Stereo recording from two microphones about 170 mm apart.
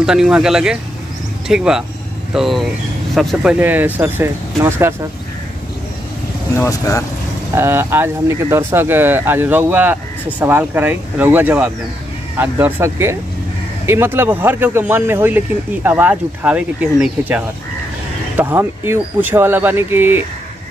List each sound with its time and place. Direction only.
0.0 s a man's voice: 5° right (ahead or behind)
6.5 s speech: 20° left (ahead or behind)
7.5 s speech: 15° right (ahead or behind)